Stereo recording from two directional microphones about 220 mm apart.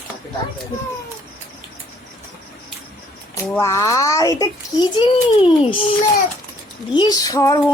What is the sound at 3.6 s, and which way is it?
A child's voice, 15° left (ahead or behind).